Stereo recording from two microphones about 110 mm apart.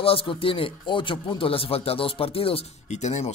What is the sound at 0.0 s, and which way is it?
Speech, 55° left (ahead or behind).